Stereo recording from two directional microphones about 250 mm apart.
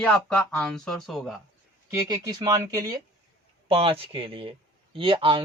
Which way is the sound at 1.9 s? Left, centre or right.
Centre.